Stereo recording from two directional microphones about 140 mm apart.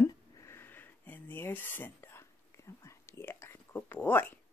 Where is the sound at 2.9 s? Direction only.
20° left (ahead or behind).